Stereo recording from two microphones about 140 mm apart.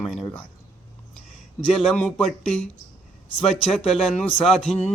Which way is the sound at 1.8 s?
5° left (ahead or behind).